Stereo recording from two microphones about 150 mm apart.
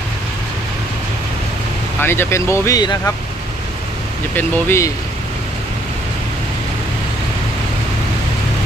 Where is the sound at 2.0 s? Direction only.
15° left (ahead or behind).